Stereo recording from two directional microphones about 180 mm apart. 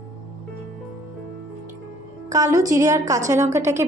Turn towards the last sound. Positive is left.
turn(degrees=-15)  # may be behind; listen again after turning